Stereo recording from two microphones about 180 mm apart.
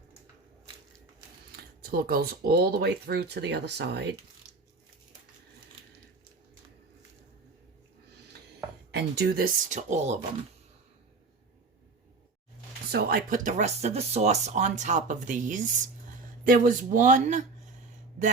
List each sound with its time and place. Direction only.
1.5 s speech: 55° right (ahead or behind)
8.9 s speech: 70° right (ahead or behind); by 10.2 s 40° right (ahead or behind)
12.9 s speech: 60° right (ahead or behind); by 17.4 s 45° right (ahead or behind)